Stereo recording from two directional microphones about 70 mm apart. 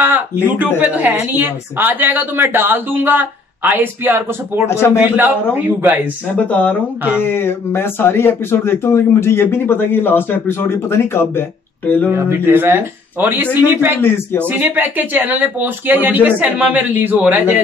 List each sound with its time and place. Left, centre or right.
0.0 s speech: right
4.6 s speech: left
4.9 s speech: right
6.4 s speech: left
11.8 s speech: left
12.3 s speech: right